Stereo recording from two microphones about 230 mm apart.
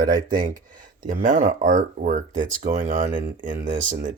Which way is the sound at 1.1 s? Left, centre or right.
Right.